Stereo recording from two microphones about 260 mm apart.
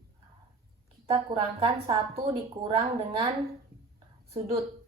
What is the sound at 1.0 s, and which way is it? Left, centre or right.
A woman's voice, right.